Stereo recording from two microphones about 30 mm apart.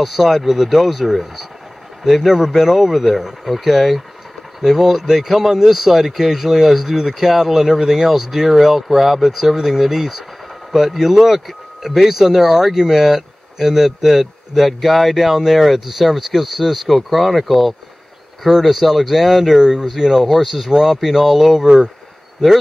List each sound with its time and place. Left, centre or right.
0.0 s speech: centre
20.2 s speech: centre
21.6 s speech: right